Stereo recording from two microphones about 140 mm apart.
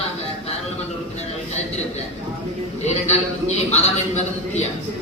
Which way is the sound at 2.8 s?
50° left (ahead or behind).